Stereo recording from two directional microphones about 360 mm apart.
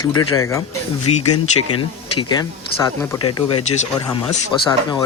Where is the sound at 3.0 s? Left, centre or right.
Centre.